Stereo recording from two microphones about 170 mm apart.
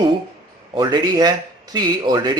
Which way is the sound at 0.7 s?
25° right (ahead or behind).